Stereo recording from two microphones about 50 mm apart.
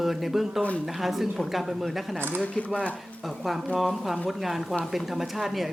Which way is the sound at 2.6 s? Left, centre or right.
Left.